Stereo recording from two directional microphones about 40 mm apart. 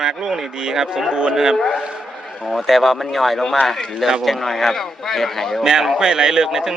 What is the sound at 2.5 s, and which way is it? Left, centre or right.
A man's voice, centre.